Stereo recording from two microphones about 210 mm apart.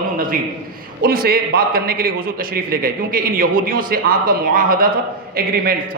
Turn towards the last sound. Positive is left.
turn(degrees=-45)  # may be behind; listen again after turning